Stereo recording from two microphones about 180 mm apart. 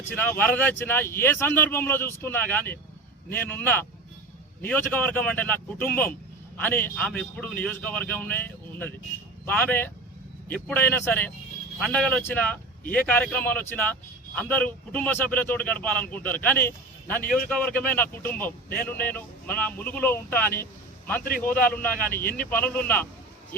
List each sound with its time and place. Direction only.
0.2 s a man's voice: 10° left (ahead or behind)
22.2 s speech: 55° left (ahead or behind)
22.4 s a man's voice: 10° left (ahead or behind)